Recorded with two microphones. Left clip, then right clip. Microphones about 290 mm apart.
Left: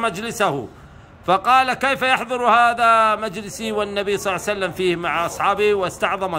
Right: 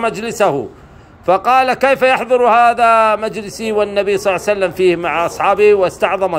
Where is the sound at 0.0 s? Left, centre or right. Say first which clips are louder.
Right 6 dB; centre.